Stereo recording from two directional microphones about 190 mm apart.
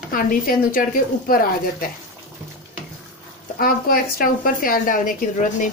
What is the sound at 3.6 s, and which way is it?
A woman's voice, 50° left (ahead or behind).